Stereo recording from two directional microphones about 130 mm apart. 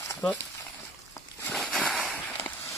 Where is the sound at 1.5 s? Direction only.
5° left (ahead or behind).